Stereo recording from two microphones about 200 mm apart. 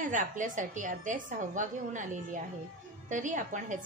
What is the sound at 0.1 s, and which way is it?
A woman's voice, 40° right (ahead or behind).